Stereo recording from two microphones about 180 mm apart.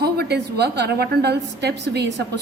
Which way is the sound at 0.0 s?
65° right (ahead or behind).